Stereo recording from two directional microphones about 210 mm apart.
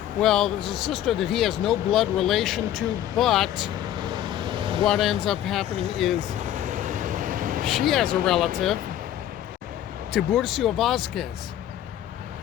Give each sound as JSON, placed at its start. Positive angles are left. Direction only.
{"t": 0.2, "sound": "speech", "side_deg": 0}
{"t": 4.1, "sound": "vehicle", "side_deg": -20}
{"t": 4.9, "sound": "speech", "side_deg": 0}
{"t": 6.4, "sound": "vehicle", "side_deg": -35}
{"t": 7.9, "sound": "speech", "side_deg": 0}
{"t": 10.1, "sound": "speech", "side_deg": 0}